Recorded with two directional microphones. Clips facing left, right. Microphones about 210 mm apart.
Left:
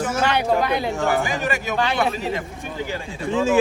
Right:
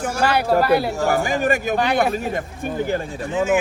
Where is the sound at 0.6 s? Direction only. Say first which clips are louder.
Right 4 dB; 5° right (ahead or behind).